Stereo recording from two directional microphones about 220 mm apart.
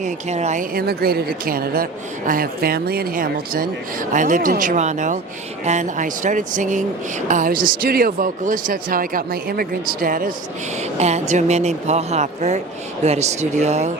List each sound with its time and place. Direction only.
0.0 s speech: 30° right (ahead or behind)